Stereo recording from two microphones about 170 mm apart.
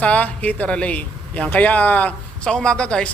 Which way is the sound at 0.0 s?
10° left (ahead or behind).